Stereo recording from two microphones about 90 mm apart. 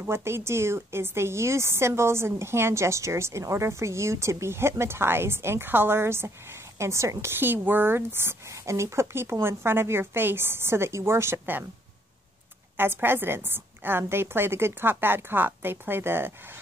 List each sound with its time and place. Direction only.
0.0 s speech: 30° right (ahead or behind)
12.7 s speech: 25° right (ahead or behind)